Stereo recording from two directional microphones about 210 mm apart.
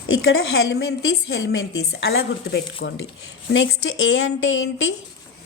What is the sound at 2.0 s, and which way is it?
Speech, 55° left (ahead or behind).